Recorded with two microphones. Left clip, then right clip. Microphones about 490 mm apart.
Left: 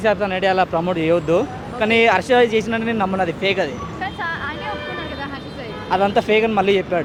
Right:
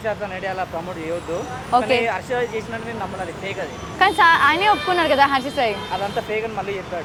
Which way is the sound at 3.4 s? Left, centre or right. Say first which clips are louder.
Left 9 dB; left.